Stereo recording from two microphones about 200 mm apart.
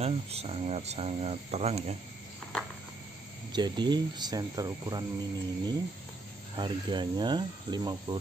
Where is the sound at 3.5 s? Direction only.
20° right (ahead or behind).